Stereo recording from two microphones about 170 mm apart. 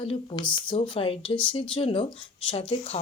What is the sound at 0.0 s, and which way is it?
A woman's voice, 30° left (ahead or behind).